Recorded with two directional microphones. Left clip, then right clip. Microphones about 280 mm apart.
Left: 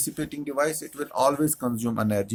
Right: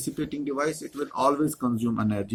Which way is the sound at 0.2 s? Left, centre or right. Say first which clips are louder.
Left 2 dB; left.